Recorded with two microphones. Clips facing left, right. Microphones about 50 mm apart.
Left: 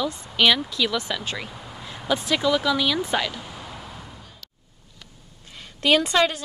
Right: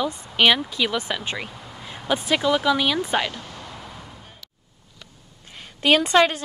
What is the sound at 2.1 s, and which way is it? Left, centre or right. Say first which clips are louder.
Speech: right 1 dB; right.